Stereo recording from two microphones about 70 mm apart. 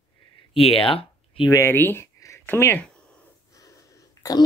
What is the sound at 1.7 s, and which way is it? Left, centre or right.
Speech, left.